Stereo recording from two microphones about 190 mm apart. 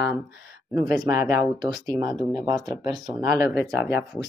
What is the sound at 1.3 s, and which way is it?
Speech, 20° right (ahead or behind).